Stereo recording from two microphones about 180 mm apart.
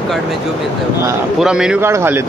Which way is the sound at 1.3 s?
5° right (ahead or behind).